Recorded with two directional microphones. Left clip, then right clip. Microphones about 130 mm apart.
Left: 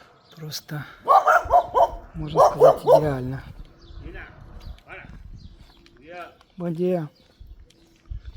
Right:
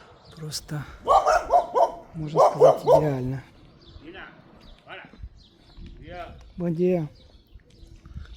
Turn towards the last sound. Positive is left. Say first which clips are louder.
# right 1 dB
turn(degrees=-30)  # may be behind; listen again after turning